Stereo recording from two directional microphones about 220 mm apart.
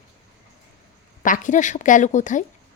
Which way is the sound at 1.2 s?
35° left (ahead or behind).